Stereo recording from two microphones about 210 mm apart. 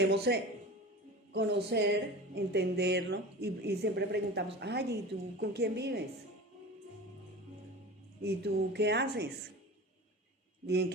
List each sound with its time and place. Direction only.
0.3 s speech: 50° right (ahead or behind)
8.2 s speech: 50° right (ahead or behind)
10.7 s speech: 55° right (ahead or behind)